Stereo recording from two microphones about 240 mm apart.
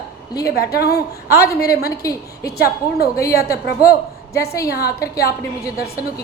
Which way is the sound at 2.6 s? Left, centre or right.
Left.